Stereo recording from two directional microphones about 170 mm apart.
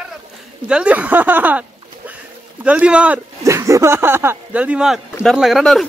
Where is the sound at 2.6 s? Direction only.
5° right (ahead or behind).